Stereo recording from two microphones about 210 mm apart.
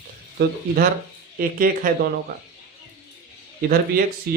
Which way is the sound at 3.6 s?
45° right (ahead or behind).